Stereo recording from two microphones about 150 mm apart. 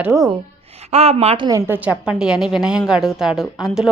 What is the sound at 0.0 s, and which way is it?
Speech, 20° right (ahead or behind).